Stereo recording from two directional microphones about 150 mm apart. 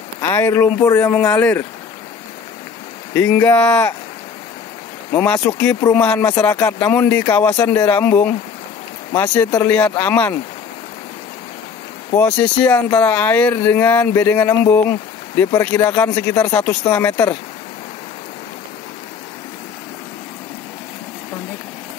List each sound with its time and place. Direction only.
0.2 s speech: 15° left (ahead or behind)
3.2 s speech: 15° left (ahead or behind)
5.1 s speech: 15° left (ahead or behind)
12.4 s speech: 10° left (ahead or behind)